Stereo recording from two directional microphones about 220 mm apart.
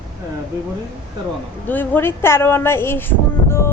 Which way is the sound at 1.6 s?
10° left (ahead or behind).